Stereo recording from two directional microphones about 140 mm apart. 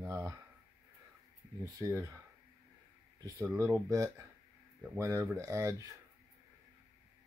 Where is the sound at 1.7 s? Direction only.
20° right (ahead or behind).